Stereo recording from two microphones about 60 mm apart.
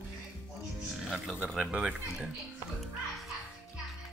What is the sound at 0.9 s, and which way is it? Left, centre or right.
Music, centre.